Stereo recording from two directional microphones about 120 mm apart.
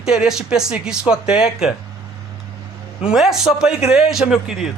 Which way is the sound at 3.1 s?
5° right (ahead or behind).